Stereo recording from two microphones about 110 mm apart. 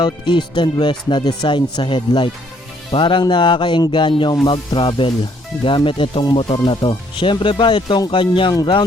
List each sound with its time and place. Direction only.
0.0 s speech: 45° left (ahead or behind)